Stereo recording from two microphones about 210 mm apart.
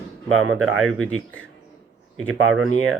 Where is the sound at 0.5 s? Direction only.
Centre (ahead or behind).